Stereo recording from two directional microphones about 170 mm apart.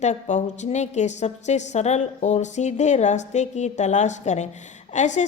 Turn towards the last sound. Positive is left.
turn(degrees=45)  # may be behind; listen again after turning